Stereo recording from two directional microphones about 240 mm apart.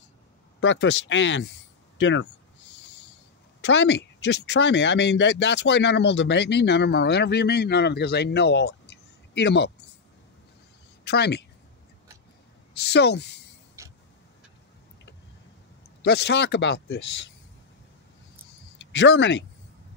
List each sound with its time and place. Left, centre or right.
0.6 s speech: left
3.6 s speech: left
11.1 s speech: left
12.7 s speech: left
13.8 s vehicle: centre
16.0 s speech: left
18.8 s speech: left